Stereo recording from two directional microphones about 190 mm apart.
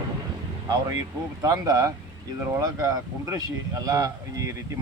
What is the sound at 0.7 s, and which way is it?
Speech, 20° right (ahead or behind).